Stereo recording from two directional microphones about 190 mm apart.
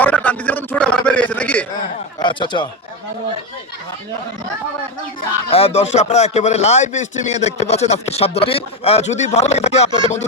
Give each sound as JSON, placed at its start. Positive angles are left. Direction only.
{"t": 0.0, "sound": "a sound", "side_deg": 10}
{"t": 2.1, "sound": "speech", "side_deg": 25}
{"t": 5.5, "sound": "speech", "side_deg": 30}